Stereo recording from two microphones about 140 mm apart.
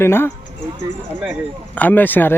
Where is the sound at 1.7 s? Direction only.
10° left (ahead or behind).